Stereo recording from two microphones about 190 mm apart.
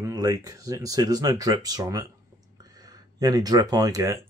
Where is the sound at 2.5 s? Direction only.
20° right (ahead or behind).